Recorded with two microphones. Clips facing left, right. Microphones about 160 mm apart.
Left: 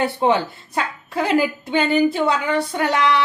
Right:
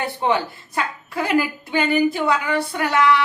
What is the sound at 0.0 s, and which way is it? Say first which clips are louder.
A woman's voice: left 3 dB; 20° left (ahead or behind).